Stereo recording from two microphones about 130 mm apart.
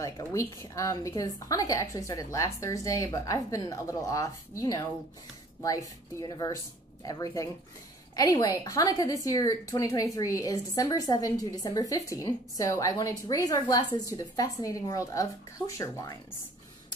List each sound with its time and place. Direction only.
0.0 s a woman's voice: 25° left (ahead or behind)
8.2 s a woman's voice: 30° left (ahead or behind)